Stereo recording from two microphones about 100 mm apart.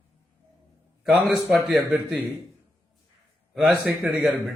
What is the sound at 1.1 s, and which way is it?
A man's voice, 10° right (ahead or behind).